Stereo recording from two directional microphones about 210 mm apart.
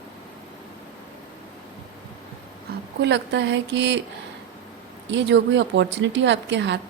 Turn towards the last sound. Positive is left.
turn(degrees=-55)  # may be behind; listen again after turning